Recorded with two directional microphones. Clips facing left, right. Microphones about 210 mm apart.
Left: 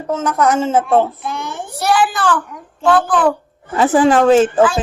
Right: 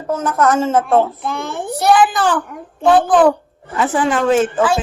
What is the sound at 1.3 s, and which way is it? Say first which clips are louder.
Speech: right 2 dB; 55° right (ahead or behind).